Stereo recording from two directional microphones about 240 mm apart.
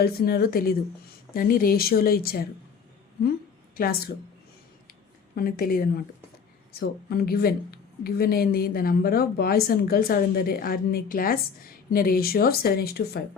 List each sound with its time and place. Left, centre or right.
0.0 s a woman's voice: left
3.8 s a woman's voice: left
5.3 s a woman's voice: left